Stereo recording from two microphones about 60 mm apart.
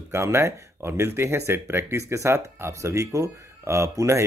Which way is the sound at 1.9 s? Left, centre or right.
Right.